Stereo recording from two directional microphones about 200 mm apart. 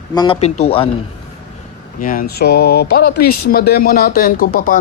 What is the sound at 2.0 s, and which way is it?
Speech, 45° left (ahead or behind).